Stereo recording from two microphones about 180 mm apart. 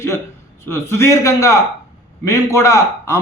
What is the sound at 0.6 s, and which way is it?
A man's voice, 15° left (ahead or behind).